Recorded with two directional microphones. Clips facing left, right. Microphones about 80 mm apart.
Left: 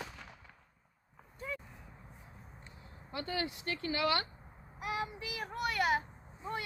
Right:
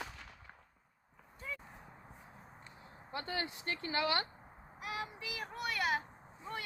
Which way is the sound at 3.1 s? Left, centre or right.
Right.